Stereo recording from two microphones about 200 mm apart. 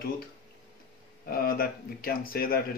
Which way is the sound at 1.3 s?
50° left (ahead or behind).